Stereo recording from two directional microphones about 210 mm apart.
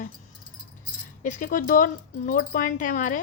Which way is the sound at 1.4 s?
40° left (ahead or behind).